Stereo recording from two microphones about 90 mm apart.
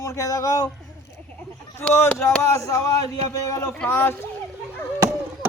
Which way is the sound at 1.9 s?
30° left (ahead or behind).